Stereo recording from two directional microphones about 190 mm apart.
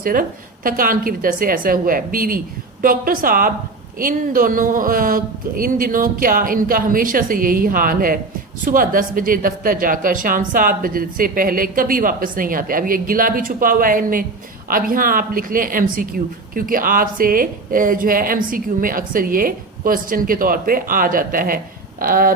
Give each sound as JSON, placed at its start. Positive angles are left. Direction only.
{"t": 0.0, "sound": "speech", "side_deg": -45}